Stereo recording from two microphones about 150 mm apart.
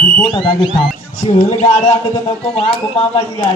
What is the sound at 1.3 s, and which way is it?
Speech, 50° left (ahead or behind).